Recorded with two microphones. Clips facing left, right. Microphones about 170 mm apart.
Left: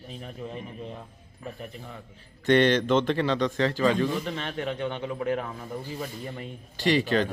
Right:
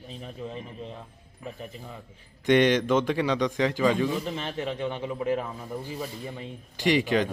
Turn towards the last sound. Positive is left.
turn(degrees=-15)  # may be behind; listen again after turning